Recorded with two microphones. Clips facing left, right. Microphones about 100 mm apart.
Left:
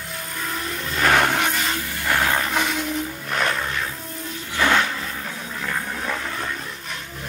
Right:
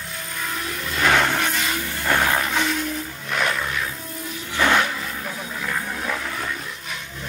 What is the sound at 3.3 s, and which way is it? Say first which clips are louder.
Music: right 1 dB; 5° right (ahead or behind).